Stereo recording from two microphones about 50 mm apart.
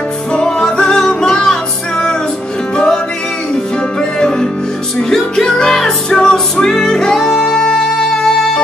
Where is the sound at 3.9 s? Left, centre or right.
Centre.